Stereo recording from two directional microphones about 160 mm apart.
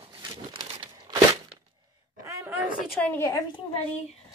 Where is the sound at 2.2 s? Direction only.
15° right (ahead or behind).